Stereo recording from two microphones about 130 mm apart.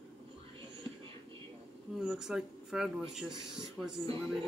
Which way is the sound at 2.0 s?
5° right (ahead or behind).